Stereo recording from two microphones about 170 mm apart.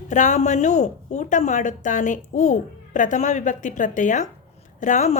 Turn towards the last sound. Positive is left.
turn(degrees=45)  # may be behind; listen again after turning